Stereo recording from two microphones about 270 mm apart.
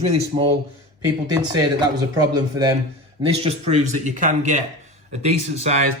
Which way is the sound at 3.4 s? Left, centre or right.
Right.